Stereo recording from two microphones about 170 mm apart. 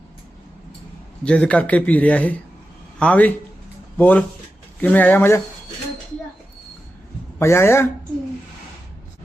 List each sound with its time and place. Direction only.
1.2 s a man's voice: 5° left (ahead or behind)
7.3 s a man's voice: 15° left (ahead or behind)